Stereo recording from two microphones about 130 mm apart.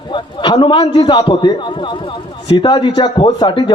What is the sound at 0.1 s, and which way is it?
A man's voice, 40° left (ahead or behind).